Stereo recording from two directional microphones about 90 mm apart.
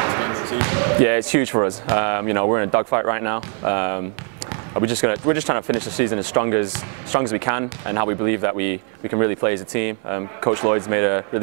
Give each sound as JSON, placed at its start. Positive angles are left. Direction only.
{"t": 0.0, "sound": "speech", "side_deg": -20}